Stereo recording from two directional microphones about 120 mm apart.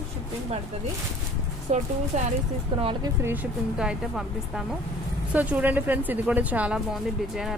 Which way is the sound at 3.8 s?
5° right (ahead or behind).